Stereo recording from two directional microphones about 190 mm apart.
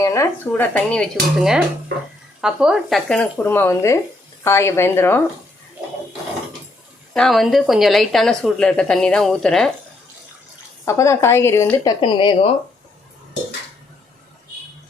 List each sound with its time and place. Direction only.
0.0 s speech: 15° left (ahead or behind)
7.1 s a woman's voice: centre (ahead or behind)
10.8 s speech: 15° left (ahead or behind)
11.9 s a woman's voice: 25° left (ahead or behind)